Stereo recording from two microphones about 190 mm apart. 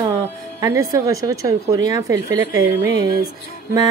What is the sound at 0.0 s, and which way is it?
A woman's voice, 20° right (ahead or behind).